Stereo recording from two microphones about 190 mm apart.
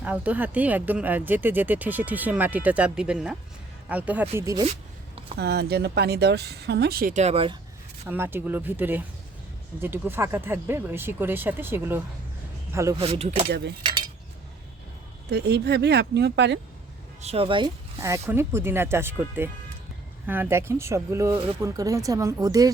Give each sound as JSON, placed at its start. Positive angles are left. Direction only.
{"t": 0.0, "sound": "speech", "side_deg": -10}
{"t": 5.4, "sound": "speech", "side_deg": -60}
{"t": 8.0, "sound": "speech", "side_deg": -10}
{"t": 13.0, "sound": "speech", "side_deg": -35}
{"t": 15.3, "sound": "speech", "side_deg": -60}
{"t": 17.2, "sound": "speech", "side_deg": -30}
{"t": 18.0, "sound": "speech", "side_deg": -15}